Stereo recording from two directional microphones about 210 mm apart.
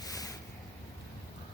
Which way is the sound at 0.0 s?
15° left (ahead or behind).